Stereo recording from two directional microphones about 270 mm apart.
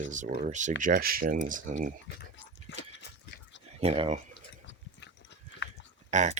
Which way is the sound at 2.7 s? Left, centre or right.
Left.